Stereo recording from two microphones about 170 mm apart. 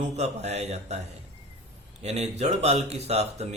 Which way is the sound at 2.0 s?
40° right (ahead or behind).